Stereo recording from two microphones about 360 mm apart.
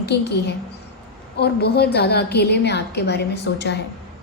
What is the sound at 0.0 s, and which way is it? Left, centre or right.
A woman's voice, left.